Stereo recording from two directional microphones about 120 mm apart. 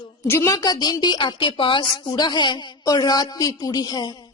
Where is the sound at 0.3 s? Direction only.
25° left (ahead or behind).